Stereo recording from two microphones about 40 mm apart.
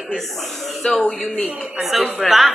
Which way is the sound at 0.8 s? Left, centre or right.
Left.